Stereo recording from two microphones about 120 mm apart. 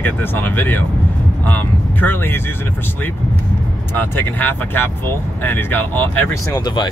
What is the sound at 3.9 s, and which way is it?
Speech, 15° left (ahead or behind).